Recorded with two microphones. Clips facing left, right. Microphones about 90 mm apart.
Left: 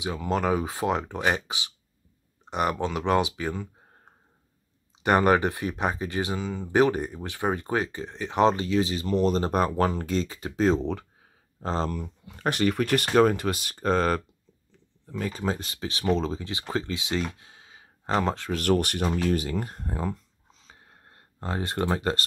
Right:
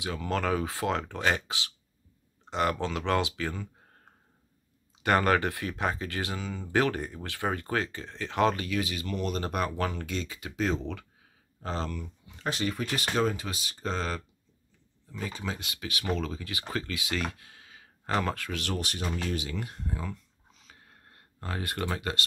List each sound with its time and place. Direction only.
0.0 s speech: 15° left (ahead or behind); by 12.1 s 35° left (ahead or behind)
12.3 s speech: 60° left (ahead or behind); by 18.5 s 25° left (ahead or behind)
18.5 s speech: 50° left (ahead or behind)
19.2 s speech: 45° left (ahead or behind)
20.6 s a sound: 25° left (ahead or behind)